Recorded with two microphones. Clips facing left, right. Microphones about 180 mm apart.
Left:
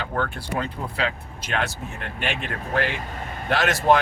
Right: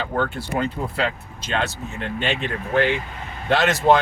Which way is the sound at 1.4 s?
25° right (ahead or behind).